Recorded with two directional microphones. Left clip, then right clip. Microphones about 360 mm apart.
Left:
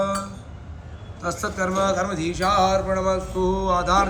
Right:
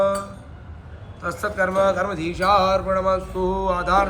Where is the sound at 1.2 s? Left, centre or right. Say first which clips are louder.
Right 3 dB; centre.